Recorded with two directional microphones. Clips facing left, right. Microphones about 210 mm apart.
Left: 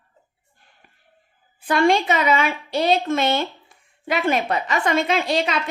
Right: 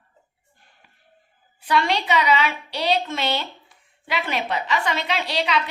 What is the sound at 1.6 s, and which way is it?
A woman's voice, 50° left (ahead or behind).